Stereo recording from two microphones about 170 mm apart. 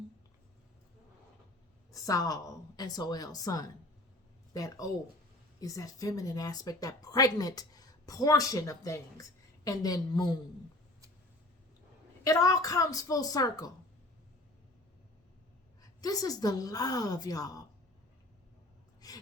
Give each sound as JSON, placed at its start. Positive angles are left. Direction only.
{"t": 1.9, "sound": "a woman's voice", "side_deg": 20}
{"t": 12.2, "sound": "a woman's voice", "side_deg": 20}
{"t": 15.8, "sound": "a woman's voice", "side_deg": 20}
{"t": 19.0, "sound": "a sound", "side_deg": 20}